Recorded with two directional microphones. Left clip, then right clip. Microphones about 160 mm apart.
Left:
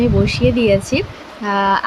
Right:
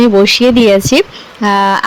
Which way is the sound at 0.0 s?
50° right (ahead or behind).